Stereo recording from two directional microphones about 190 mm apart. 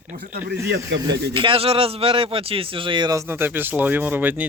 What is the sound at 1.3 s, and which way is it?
Speech, 25° right (ahead or behind).